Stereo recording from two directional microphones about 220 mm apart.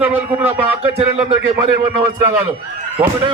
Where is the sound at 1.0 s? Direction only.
30° right (ahead or behind).